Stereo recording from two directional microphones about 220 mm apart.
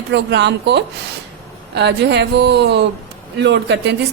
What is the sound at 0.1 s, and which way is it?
Speech, 50° right (ahead or behind).